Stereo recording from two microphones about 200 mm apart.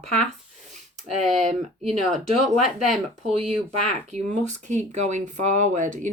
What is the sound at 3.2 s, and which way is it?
Speech, 30° right (ahead or behind).